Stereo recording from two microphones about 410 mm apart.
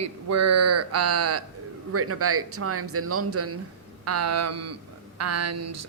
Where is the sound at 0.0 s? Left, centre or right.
Right.